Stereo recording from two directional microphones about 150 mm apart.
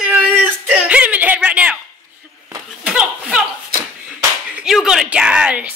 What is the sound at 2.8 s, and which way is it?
Speech, 5° right (ahead or behind).